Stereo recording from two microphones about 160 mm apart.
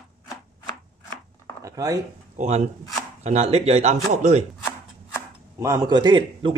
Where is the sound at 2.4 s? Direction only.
45° right (ahead or behind).